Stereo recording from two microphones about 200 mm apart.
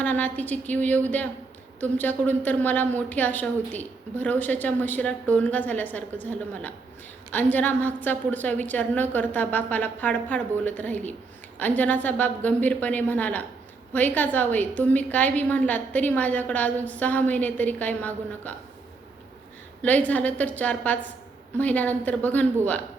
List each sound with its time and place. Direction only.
0.0 s a woman's voice: 10° left (ahead or behind)
19.8 s a woman's voice: 5° left (ahead or behind)